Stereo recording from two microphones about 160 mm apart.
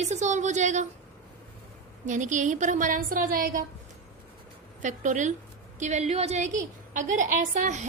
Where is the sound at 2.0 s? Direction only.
50° right (ahead or behind).